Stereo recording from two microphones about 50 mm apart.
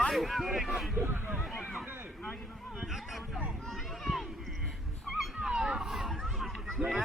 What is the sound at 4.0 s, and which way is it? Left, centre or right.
Clip-clop, centre.